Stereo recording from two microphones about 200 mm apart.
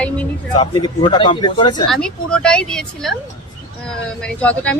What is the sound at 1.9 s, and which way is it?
Speech, 5° left (ahead or behind).